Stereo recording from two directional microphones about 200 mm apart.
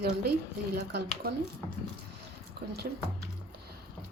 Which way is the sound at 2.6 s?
50° right (ahead or behind).